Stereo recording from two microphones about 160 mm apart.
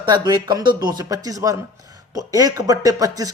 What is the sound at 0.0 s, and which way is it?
Speech, 25° right (ahead or behind).